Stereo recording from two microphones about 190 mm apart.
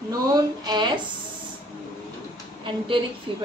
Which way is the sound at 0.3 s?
20° right (ahead or behind).